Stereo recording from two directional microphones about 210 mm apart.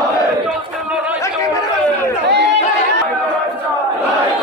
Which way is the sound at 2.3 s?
55° right (ahead or behind).